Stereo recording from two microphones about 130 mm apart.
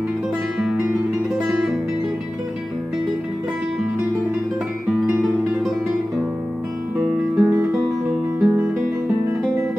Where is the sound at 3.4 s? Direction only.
5° right (ahead or behind).